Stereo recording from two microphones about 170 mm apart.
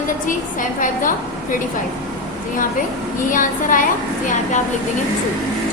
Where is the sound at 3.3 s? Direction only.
50° left (ahead or behind).